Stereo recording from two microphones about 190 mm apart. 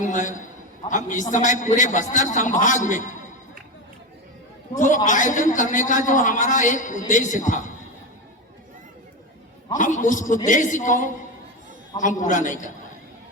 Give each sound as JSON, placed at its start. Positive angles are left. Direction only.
{"t": 0.1, "sound": "a man's voice", "side_deg": 40}
{"t": 4.8, "sound": "a man's voice", "side_deg": 40}
{"t": 9.7, "sound": "a man's voice", "side_deg": 40}